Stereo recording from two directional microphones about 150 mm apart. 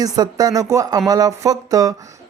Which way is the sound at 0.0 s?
25° right (ahead or behind).